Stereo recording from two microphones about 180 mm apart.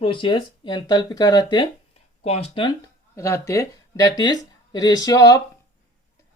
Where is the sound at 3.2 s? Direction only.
15° left (ahead or behind).